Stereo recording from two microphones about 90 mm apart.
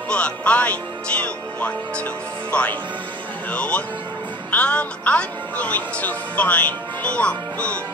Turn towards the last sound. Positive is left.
turn(degrees=15)  # may be behind; listen again after turning